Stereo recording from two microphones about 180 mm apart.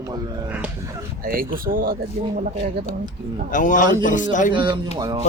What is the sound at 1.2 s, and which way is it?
Speech, 55° right (ahead or behind).